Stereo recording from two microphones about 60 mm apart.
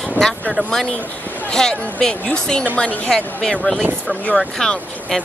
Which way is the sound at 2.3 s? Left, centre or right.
Centre.